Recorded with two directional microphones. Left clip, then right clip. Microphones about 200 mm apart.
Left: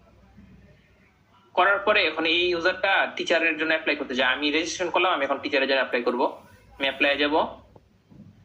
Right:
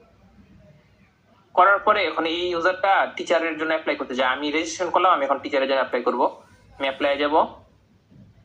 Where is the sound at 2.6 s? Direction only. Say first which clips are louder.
Right 7 dB; 25° left (ahead or behind).